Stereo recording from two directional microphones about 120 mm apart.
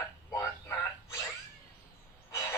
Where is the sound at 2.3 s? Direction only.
25° left (ahead or behind).